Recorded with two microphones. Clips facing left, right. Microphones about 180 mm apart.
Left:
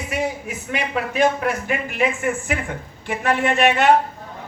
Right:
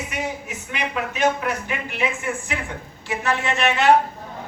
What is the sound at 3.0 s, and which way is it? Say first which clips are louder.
Speech: left 4 dB; 55° left (ahead or behind).